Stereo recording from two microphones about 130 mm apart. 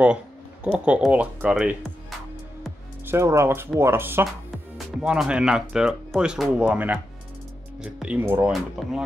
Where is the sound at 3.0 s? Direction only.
20° right (ahead or behind).